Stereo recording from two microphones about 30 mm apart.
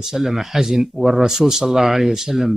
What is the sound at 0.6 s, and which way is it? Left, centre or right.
A man's voice, centre.